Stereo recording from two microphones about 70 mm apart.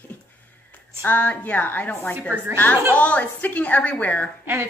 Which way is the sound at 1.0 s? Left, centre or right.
Left.